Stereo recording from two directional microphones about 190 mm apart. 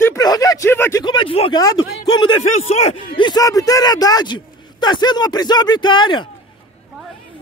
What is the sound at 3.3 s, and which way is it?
Speech, 20° left (ahead or behind).